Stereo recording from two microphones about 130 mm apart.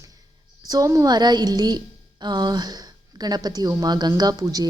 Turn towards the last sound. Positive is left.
turn(degrees=-25)  # may be behind; listen again after turning